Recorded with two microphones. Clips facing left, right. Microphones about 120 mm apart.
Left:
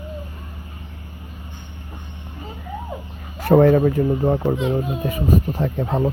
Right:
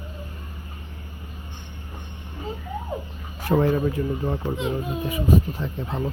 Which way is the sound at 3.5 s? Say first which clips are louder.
Left 7 dB; 65° left (ahead or behind).